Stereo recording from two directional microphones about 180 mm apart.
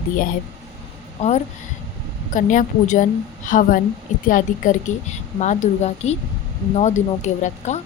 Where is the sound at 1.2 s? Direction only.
40° left (ahead or behind).